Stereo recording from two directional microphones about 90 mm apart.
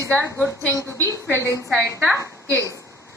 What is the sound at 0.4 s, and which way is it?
Speech, 30° left (ahead or behind).